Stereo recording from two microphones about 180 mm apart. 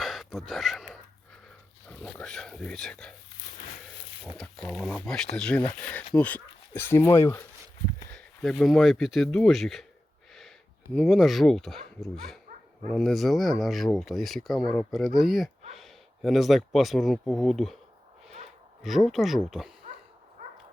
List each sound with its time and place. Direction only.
0.0 s gasp: centre (ahead or behind)
1.9 s speech: 5° left (ahead or behind)
4.3 s speech: 5° left (ahead or behind)
8.1 s speech: centre (ahead or behind)
10.9 s speech: centre (ahead or behind)
18.8 s speech: centre (ahead or behind)
20.4 s dog: 45° right (ahead or behind)